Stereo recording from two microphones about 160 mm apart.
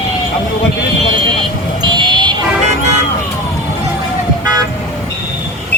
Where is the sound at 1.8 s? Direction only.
30° right (ahead or behind).